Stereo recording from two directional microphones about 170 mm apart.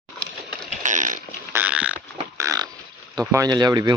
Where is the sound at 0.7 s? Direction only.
45° right (ahead or behind).